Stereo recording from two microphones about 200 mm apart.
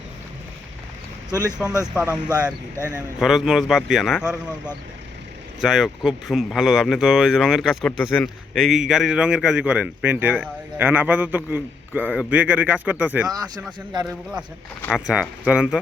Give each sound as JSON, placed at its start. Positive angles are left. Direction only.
{"t": 2.0, "sound": "speech", "side_deg": -5}
{"t": 2.7, "sound": "speech", "side_deg": 10}
{"t": 3.2, "sound": "speech", "side_deg": 0}
{"t": 13.2, "sound": "speech", "side_deg": -20}
{"t": 14.0, "sound": "speech", "side_deg": -5}